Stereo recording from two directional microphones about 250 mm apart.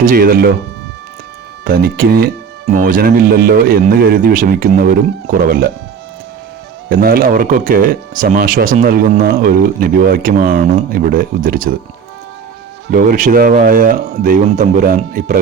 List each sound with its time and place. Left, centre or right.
0.0 s speech: right
1.6 s speech: right
6.8 s speech: right
12.9 s speech: right